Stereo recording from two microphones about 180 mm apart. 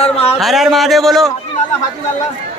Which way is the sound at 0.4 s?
Centre (ahead or behind).